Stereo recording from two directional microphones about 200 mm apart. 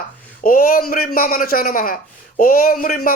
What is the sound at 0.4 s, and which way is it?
A man's voice, 45° left (ahead or behind).